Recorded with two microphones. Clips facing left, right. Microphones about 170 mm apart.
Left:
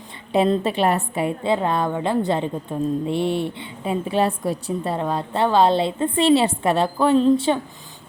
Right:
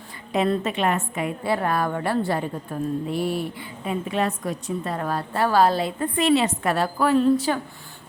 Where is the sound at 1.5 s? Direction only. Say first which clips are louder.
Left 1 dB; 20° left (ahead or behind).